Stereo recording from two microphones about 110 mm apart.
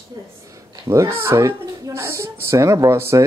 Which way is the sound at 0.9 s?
25° right (ahead or behind).